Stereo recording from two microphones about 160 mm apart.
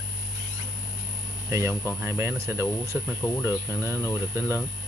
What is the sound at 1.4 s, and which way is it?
Speech, 15° right (ahead or behind).